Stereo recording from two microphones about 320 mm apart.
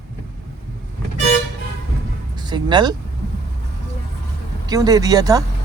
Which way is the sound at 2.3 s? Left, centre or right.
Centre.